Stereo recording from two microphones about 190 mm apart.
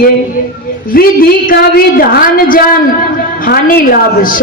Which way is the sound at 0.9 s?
50° left (ahead or behind).